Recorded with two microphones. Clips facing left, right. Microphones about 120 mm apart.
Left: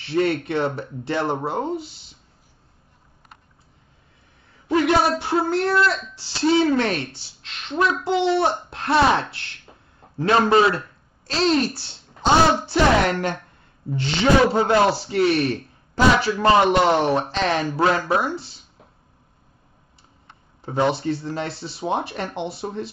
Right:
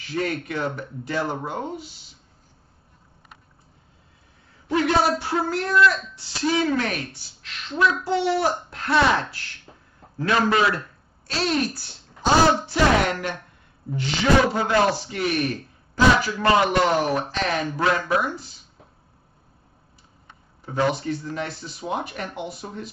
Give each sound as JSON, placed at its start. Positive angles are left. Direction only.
{"t": 0.1, "sound": "a man's voice", "side_deg": 30}
{"t": 5.2, "sound": "a man's voice", "side_deg": 25}
{"t": 20.6, "sound": "a man's voice", "side_deg": 25}